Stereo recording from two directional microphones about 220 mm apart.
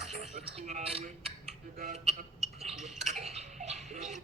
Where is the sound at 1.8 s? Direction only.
40° right (ahead or behind).